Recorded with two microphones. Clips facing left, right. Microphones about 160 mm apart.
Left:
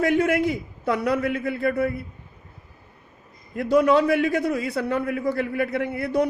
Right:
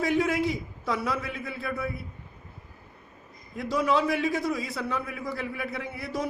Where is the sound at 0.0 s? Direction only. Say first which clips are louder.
Left 5 dB; 60° left (ahead or behind).